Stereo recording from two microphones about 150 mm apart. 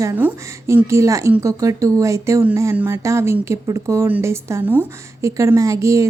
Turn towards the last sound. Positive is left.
turn(degrees=-20)  # may be behind; listen again after turning